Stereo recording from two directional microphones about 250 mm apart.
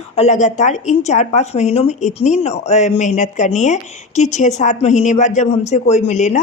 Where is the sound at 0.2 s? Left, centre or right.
Left.